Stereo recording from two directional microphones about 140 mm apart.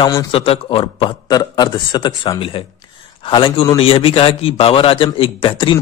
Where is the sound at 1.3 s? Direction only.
30° left (ahead or behind).